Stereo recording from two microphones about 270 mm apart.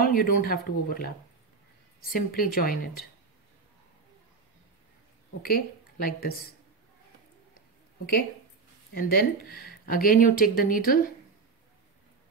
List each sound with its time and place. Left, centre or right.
0.0 s speech: left
2.1 s speech: left
5.4 s a woman's voice: left
8.9 s speech: left